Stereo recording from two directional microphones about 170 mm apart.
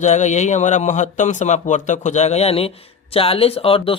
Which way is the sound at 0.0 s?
45° left (ahead or behind).